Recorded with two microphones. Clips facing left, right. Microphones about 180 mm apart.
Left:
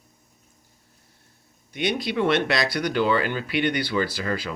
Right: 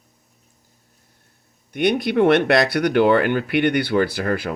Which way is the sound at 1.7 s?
55° right (ahead or behind).